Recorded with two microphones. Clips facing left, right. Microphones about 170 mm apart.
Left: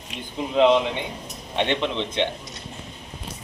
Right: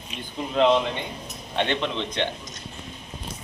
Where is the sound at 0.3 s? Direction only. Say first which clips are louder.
Left 2 dB; 15° left (ahead or behind).